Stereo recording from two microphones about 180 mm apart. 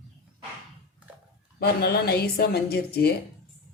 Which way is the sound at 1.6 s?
60° left (ahead or behind).